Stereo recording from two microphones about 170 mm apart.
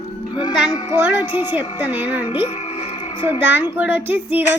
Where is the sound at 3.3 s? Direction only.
10° right (ahead or behind).